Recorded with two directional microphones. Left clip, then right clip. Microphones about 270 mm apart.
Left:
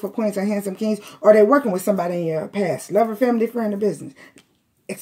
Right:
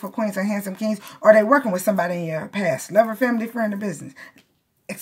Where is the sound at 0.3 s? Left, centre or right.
Right.